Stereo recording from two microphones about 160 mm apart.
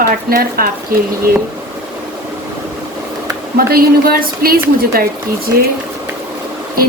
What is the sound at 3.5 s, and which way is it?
A woman's voice, 70° right (ahead or behind).